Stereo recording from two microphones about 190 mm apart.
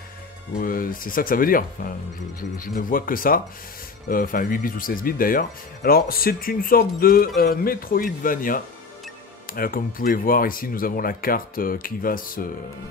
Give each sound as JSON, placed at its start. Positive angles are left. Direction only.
{"t": 0.6, "sound": "speech", "side_deg": 50}